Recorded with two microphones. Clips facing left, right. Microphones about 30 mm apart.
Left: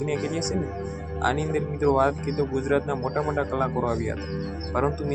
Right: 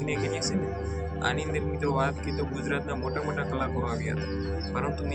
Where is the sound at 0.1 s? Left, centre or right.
Centre.